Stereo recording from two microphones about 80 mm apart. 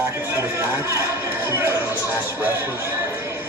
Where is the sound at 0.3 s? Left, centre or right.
Right.